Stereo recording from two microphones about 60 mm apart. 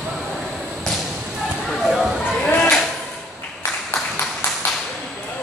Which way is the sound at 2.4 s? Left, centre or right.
Left.